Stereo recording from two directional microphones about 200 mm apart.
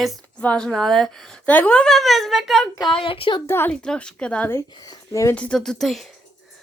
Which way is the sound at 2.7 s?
25° left (ahead or behind).